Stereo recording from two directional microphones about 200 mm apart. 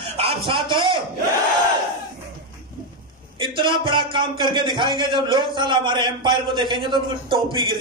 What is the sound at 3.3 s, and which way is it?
A man's voice, 25° right (ahead or behind).